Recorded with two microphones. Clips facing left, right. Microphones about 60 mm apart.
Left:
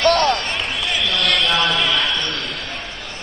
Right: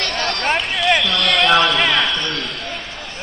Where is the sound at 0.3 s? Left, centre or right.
Right.